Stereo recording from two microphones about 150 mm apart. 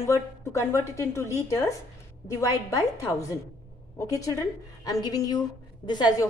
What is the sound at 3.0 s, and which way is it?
A woman's voice, 25° left (ahead or behind).